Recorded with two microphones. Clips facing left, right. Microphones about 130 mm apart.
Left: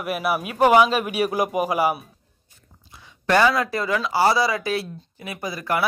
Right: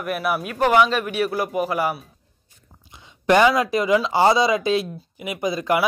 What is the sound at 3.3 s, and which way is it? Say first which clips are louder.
Speech: right 3 dB; 20° right (ahead or behind).